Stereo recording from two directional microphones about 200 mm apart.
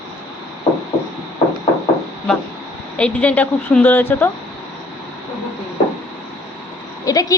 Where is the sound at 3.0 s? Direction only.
5° left (ahead or behind).